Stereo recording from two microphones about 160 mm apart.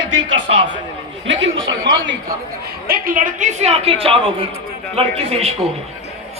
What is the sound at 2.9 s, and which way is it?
Speech, 60° right (ahead or behind).